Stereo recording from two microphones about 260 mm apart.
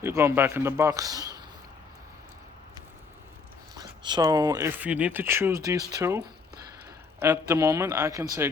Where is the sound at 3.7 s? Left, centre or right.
Centre.